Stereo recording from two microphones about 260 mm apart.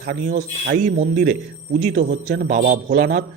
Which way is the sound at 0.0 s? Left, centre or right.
Right.